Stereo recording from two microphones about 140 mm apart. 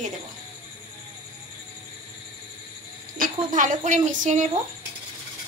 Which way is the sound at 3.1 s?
70° right (ahead or behind).